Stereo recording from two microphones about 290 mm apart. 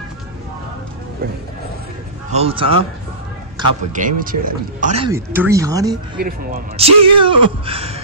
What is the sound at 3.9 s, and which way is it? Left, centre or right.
Speech, right.